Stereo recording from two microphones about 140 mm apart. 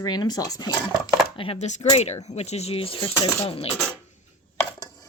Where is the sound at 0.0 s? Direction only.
30° left (ahead or behind).